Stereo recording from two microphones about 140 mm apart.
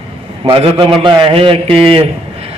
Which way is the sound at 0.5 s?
40° right (ahead or behind).